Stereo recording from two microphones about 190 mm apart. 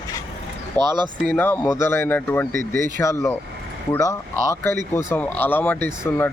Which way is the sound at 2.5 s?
45° right (ahead or behind).